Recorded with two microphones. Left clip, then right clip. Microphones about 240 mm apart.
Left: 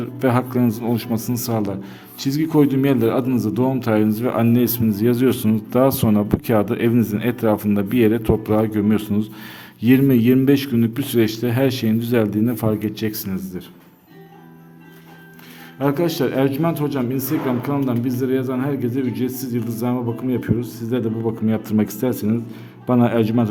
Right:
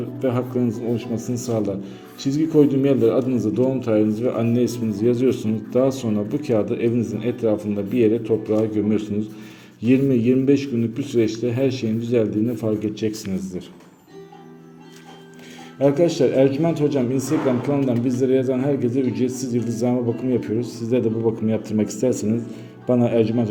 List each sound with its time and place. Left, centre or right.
0.2 s a man's voice: left; by 13.7 s centre
15.8 s a man's voice: centre